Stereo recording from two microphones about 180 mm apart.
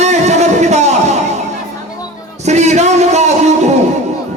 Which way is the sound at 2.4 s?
40° right (ahead or behind).